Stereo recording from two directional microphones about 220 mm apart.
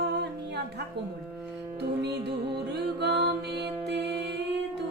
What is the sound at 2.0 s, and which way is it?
A woman's voice, 50° right (ahead or behind).